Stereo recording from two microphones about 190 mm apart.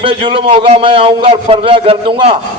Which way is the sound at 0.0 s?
25° right (ahead or behind).